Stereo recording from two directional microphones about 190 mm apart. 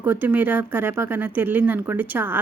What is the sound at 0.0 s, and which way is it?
Speech, 10° right (ahead or behind).